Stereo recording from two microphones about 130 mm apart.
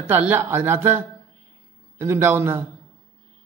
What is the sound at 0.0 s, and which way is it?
A man's voice, 15° right (ahead or behind).